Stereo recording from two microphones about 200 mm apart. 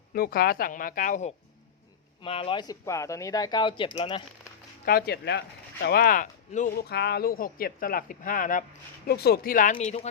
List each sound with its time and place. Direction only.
0.1 s speech: 45° left (ahead or behind)
2.2 s speech: 25° left (ahead or behind)
4.9 s speech: 50° left (ahead or behind)
9.0 s speech: 50° left (ahead or behind); by 10.1 s 35° left (ahead or behind)